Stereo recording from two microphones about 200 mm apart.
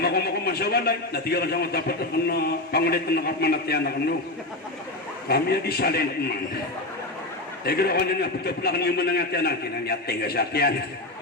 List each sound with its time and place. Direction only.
0.0 s a man's voice: 50° left (ahead or behind)
5.3 s a man's voice: 50° left (ahead or behind)
7.6 s a man's voice: 50° left (ahead or behind)